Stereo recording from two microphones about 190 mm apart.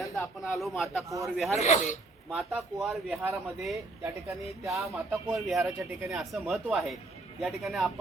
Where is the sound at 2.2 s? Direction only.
Centre (ahead or behind).